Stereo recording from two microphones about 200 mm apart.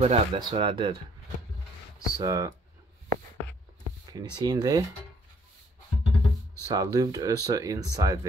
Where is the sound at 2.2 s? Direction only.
20° right (ahead or behind).